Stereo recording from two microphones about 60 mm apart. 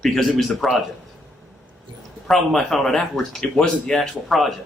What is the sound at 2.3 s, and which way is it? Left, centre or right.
Speech, centre.